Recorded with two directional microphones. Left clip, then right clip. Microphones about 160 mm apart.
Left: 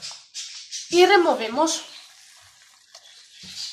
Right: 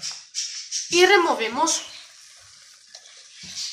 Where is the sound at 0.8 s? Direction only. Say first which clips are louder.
Left 1 dB; 70° left (ahead or behind).